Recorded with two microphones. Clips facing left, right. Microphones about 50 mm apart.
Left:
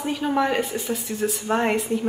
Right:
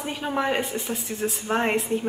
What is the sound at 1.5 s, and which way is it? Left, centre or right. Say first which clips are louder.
Speech: left 1 dB; centre.